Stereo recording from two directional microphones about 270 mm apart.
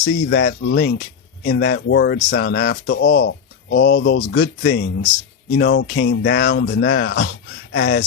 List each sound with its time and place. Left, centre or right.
0.0 s speech: left